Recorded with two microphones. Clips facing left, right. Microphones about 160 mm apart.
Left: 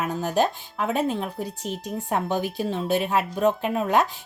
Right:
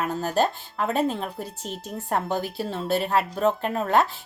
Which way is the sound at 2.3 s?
15° left (ahead or behind).